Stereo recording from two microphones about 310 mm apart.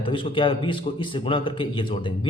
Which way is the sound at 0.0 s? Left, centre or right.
Centre.